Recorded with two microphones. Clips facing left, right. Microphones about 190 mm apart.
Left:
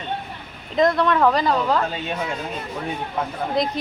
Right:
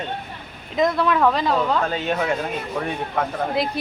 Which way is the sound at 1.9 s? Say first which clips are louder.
Right 4 dB; 65° right (ahead or behind).